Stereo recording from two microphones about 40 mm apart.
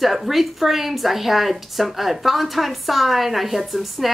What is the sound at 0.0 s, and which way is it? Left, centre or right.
Speech, centre.